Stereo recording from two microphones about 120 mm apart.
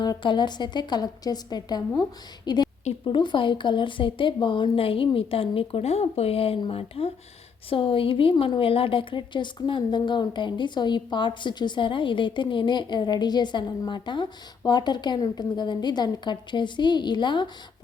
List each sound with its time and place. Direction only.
0.0 s a woman's voice: 40° left (ahead or behind)